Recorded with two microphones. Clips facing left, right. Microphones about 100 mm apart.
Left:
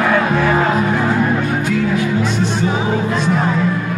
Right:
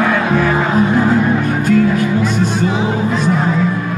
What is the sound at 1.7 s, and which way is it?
Music, 45° right (ahead or behind).